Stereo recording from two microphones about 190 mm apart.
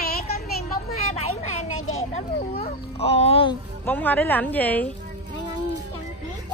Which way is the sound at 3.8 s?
10° left (ahead or behind).